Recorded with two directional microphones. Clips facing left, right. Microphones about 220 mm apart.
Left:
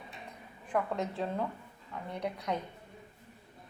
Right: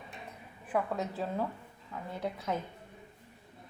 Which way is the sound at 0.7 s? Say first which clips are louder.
Even; 5° right (ahead or behind).